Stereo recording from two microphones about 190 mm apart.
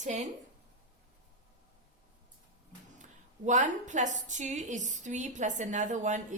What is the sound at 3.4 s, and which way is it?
A woman's voice, 40° right (ahead or behind).